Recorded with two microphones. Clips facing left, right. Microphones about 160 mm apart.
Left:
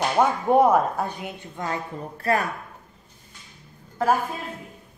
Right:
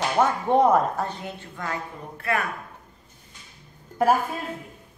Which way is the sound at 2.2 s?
35° left (ahead or behind).